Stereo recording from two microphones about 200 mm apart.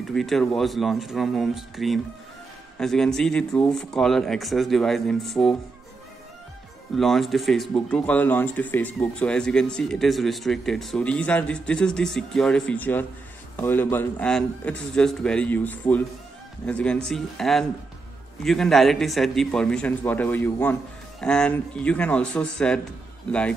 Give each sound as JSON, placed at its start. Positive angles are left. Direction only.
{"t": 0.1, "sound": "speech", "side_deg": 0}
{"t": 7.0, "sound": "a man's voice", "side_deg": 0}